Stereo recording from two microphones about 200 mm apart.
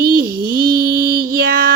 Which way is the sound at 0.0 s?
45° right (ahead or behind).